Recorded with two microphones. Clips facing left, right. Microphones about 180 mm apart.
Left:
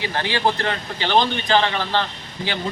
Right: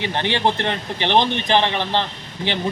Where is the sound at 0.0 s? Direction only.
20° right (ahead or behind).